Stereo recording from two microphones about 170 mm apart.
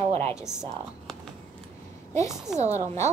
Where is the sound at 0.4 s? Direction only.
Centre (ahead or behind).